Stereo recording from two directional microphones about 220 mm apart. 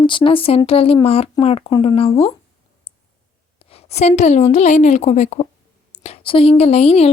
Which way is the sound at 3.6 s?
25° left (ahead or behind).